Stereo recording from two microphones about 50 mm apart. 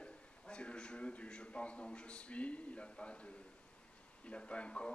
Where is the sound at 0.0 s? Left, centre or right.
Left.